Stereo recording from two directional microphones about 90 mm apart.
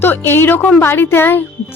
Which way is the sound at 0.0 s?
25° left (ahead or behind).